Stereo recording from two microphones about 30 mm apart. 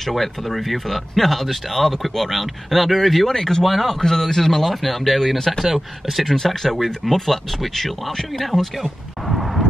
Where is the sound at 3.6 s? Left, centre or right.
Centre.